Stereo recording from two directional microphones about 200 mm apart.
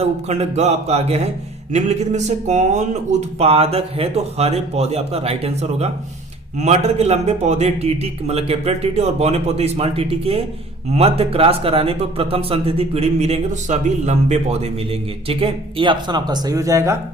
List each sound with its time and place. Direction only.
0.0 s speech: 35° right (ahead or behind); by 17.0 s 15° right (ahead or behind)